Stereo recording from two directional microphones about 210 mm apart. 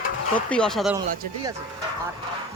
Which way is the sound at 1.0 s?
20° right (ahead or behind).